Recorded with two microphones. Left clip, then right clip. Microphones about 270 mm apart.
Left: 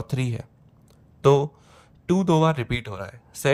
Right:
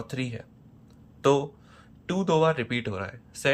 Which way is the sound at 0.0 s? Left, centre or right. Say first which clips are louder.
Left 3 dB; left.